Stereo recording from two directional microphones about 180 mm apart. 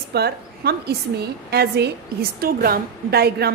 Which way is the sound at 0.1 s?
60° right (ahead or behind).